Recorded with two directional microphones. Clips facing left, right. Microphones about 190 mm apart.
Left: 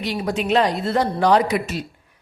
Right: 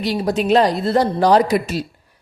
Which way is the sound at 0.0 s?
35° right (ahead or behind).